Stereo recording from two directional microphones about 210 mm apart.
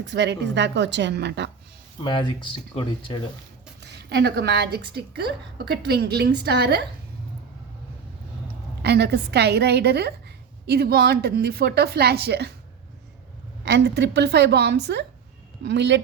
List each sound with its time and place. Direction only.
0.0 s a woman's voice: 55° right (ahead or behind)
2.0 s speech: 25° left (ahead or behind)
3.8 s a woman's voice: 55° right (ahead or behind)
8.8 s a woman's voice: 50° right (ahead or behind)
13.7 s a woman's voice: 55° right (ahead or behind)